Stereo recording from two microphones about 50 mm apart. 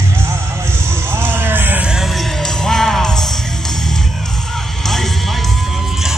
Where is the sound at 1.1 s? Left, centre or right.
Right.